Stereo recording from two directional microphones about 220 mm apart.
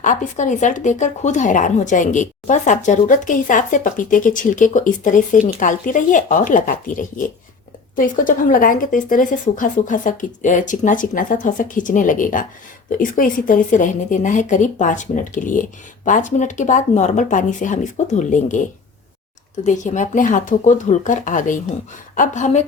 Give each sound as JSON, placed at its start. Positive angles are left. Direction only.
{"t": 0.0, "sound": "speech", "side_deg": 35}
{"t": 19.6, "sound": "speech", "side_deg": 35}